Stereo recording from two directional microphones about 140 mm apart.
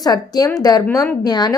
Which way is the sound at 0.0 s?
25° left (ahead or behind).